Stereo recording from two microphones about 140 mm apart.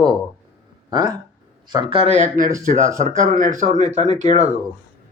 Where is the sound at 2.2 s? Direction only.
75° right (ahead or behind); by 4.4 s 55° right (ahead or behind).